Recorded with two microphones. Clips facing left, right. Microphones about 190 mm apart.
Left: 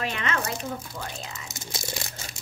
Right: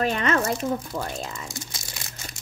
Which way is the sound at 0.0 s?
40° right (ahead or behind).